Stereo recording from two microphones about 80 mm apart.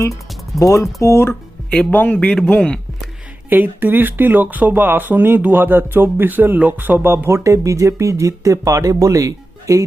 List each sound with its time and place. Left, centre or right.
0.6 s speech: left
1.9 s a man's voice: centre
2.1 s a man's voice: centre
3.5 s speech: right